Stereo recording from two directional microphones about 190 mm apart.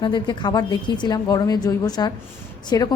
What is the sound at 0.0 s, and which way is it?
A woman's voice, 25° left (ahead or behind).